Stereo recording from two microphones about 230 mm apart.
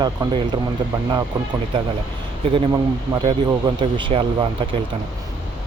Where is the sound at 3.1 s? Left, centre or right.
Right.